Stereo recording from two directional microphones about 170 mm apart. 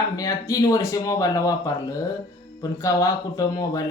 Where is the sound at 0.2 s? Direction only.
20° left (ahead or behind).